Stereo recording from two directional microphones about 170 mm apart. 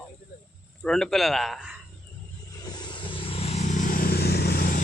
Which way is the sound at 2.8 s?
30° left (ahead or behind).